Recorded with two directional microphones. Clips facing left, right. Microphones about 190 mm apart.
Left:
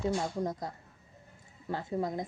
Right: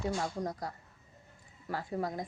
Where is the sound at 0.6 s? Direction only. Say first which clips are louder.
Left 1 dB; 20° left (ahead or behind).